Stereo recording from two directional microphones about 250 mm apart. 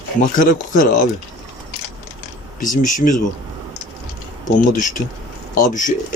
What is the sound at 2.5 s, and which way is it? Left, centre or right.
Speech, left.